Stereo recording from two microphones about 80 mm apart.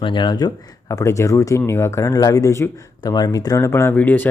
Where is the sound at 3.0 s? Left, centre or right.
Left.